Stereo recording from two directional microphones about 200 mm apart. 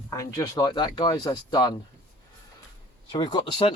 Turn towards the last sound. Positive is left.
turn(degrees=25)  # may be behind; listen again after turning